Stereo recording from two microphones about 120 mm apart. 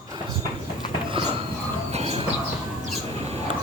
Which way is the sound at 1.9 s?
60° right (ahead or behind).